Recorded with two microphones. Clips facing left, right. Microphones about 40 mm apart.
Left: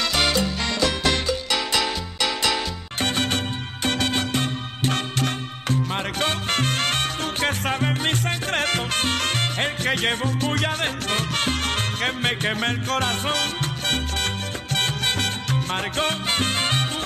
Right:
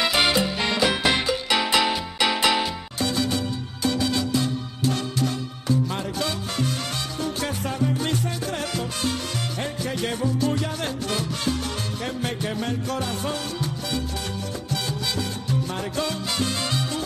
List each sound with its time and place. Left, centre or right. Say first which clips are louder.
0.0 s music: right 1 dB; centre
3.0 s music: left 1 dB; left